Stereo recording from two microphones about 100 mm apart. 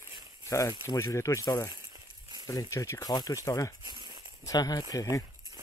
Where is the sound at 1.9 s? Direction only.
45° right (ahead or behind).